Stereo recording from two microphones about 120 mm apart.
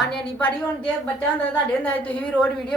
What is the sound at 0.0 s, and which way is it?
Speech, 10° left (ahead or behind).